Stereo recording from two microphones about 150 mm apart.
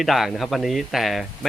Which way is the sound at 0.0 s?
Centre (ahead or behind).